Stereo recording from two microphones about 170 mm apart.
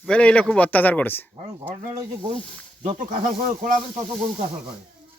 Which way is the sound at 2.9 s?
50° right (ahead or behind).